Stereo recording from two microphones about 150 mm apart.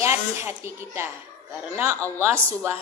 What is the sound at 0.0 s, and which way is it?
A woman's voice, 15° right (ahead or behind).